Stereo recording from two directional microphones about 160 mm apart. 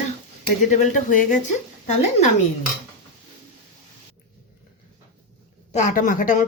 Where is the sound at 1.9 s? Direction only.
45° left (ahead or behind).